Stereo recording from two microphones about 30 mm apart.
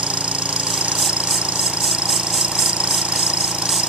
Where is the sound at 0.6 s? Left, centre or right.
Right.